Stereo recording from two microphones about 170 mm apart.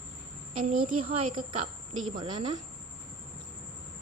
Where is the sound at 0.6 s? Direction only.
50° right (ahead or behind).